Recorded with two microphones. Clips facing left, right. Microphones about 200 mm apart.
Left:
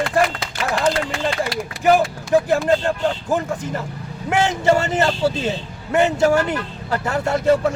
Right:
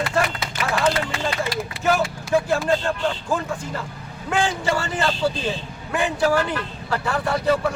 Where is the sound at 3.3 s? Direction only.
20° left (ahead or behind).